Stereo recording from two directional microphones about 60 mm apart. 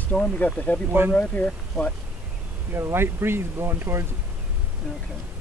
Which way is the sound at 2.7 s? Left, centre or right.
Right.